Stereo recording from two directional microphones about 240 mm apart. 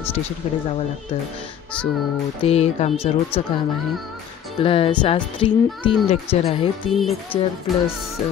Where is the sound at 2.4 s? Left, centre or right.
Left.